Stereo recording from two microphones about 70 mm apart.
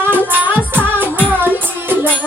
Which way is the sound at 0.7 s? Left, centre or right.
Right.